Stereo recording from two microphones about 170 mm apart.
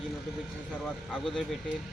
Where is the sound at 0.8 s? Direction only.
5° left (ahead or behind).